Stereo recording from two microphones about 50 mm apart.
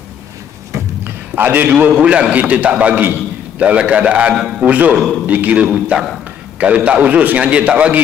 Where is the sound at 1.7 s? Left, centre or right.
Right.